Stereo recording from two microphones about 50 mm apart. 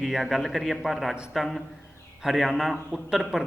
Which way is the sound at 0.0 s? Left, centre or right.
Centre.